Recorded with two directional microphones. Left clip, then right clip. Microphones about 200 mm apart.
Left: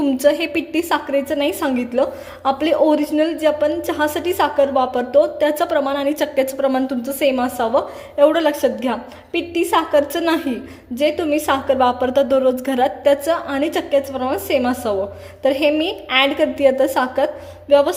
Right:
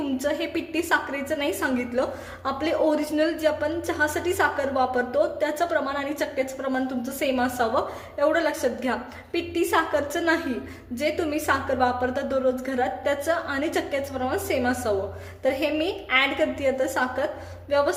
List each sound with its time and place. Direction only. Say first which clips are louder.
0.2 s a woman's voice: left 11 dB; 35° left (ahead or behind)